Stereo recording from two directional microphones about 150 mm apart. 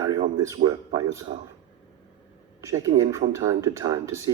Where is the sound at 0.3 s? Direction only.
25° right (ahead or behind).